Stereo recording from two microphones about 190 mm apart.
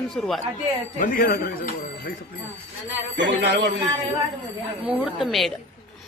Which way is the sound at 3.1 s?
65° right (ahead or behind).